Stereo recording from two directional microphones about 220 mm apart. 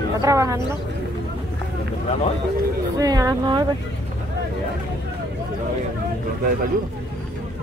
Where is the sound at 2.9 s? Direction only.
15° right (ahead or behind).